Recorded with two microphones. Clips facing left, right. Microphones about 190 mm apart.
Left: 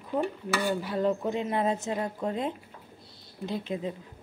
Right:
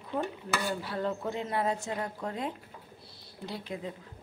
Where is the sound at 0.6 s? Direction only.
15° left (ahead or behind).